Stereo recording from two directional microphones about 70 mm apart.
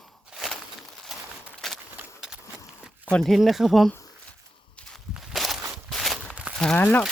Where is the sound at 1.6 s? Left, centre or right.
Centre.